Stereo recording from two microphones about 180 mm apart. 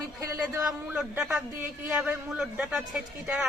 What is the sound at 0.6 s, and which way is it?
A woman's voice, 5° right (ahead or behind).